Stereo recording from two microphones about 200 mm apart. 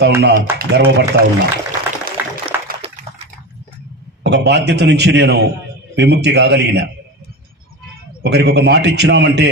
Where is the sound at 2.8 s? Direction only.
30° right (ahead or behind).